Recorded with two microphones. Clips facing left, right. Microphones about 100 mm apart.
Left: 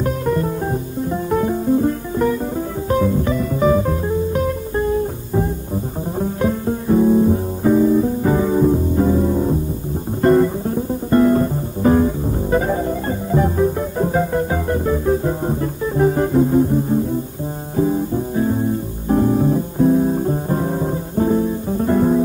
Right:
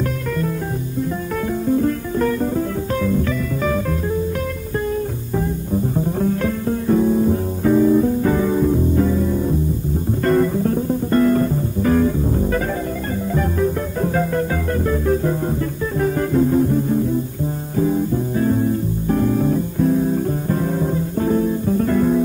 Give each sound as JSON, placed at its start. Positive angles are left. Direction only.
{"t": 0.0, "sound": "music", "side_deg": 30}
{"t": 10.2, "sound": "music", "side_deg": 20}
{"t": 17.7, "sound": "music", "side_deg": 25}